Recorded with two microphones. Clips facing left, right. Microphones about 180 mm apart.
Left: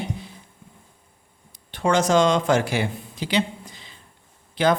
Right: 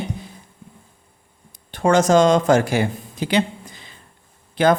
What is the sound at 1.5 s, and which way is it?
Speech, 45° right (ahead or behind).